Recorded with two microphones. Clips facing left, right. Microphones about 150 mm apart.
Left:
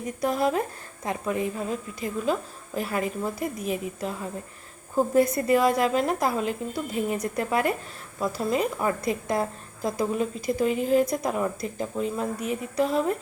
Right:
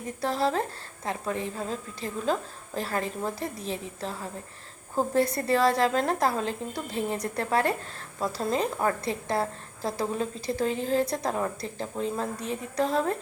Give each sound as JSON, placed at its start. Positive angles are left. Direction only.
{"t": 0.2, "sound": "a woman's voice", "side_deg": 15}